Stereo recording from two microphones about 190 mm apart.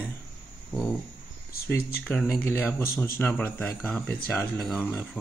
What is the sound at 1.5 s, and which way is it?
Speech, 55° left (ahead or behind).